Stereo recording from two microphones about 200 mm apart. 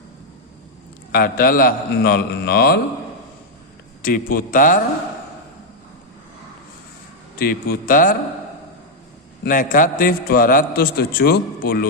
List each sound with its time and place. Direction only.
1.1 s a man's voice: 45° left (ahead or behind)
4.0 s a man's voice: 45° left (ahead or behind)
7.3 s a man's voice: 50° left (ahead or behind)
9.4 s a man's voice: 40° left (ahead or behind)